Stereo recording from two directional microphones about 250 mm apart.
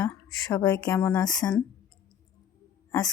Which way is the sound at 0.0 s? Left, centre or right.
Centre.